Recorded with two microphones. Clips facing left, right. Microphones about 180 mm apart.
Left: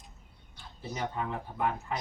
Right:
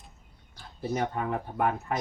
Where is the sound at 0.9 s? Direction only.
55° right (ahead or behind).